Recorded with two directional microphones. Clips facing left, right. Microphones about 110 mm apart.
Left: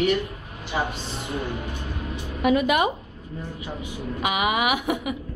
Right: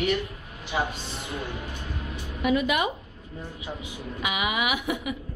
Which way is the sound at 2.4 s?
50° left (ahead or behind).